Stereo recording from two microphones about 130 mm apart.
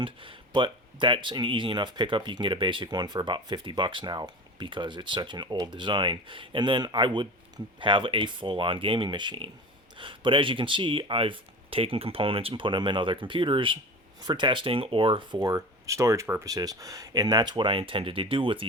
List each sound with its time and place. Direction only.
0.0 s speech: 40° right (ahead or behind)